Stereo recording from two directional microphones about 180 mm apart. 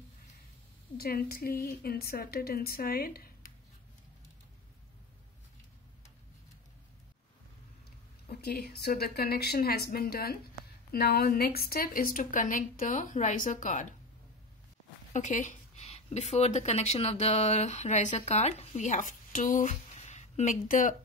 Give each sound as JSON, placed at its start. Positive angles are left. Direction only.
{"t": 0.9, "sound": "a woman's voice", "side_deg": 55}
{"t": 8.3, "sound": "a woman's voice", "side_deg": 60}
{"t": 15.1, "sound": "speech", "side_deg": 45}